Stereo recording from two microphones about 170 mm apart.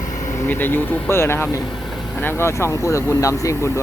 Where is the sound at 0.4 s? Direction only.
10° left (ahead or behind).